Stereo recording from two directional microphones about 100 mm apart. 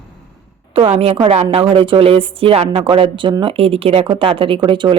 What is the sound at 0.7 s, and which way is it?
Speech, 75° right (ahead or behind).